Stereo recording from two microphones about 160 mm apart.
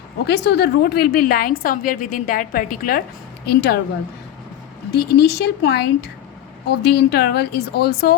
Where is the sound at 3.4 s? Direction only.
85° left.